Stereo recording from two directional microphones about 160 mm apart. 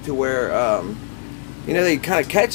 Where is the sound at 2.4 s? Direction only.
5° left (ahead or behind).